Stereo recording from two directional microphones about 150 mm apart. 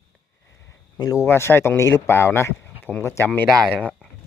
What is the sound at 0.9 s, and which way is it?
Speech, 25° left (ahead or behind).